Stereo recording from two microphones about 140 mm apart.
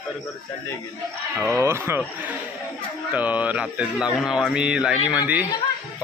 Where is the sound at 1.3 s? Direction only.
20° right (ahead or behind).